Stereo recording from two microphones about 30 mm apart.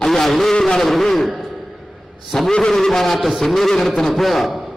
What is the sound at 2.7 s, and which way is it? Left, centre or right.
A man's voice, centre.